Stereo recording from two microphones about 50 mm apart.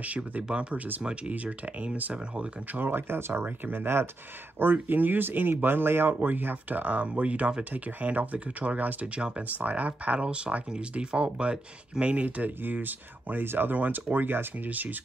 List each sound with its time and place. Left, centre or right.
0.0 s speech: right
2.7 s speech: right
3.4 s speech: right
3.8 s speech: right
4.8 s speech: right
9.0 s speech: right